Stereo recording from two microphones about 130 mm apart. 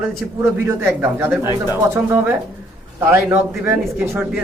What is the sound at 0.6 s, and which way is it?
Speech, 20° right (ahead or behind).